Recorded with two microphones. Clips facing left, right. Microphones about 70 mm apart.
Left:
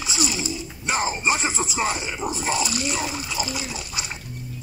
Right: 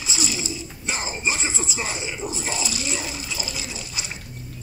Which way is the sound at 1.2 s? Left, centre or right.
Centre.